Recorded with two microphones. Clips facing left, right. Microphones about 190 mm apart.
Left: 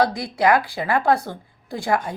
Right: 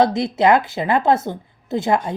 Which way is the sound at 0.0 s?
25° right (ahead or behind).